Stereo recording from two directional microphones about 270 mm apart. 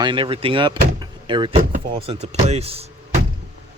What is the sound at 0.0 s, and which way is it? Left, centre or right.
Speech, centre.